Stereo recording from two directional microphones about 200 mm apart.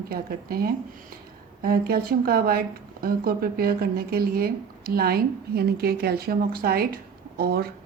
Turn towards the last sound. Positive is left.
turn(degrees=-50)  # may be behind; listen again after turning